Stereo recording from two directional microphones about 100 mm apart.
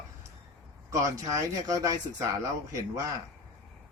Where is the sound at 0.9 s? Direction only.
35° right (ahead or behind).